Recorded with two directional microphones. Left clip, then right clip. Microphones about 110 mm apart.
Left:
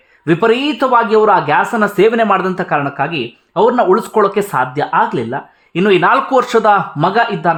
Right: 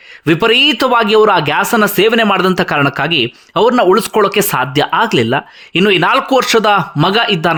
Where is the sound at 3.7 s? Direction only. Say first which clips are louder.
Right 4 dB; 30° right (ahead or behind).